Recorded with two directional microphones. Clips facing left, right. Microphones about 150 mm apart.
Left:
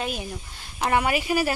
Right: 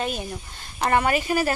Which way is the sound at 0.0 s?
5° left (ahead or behind).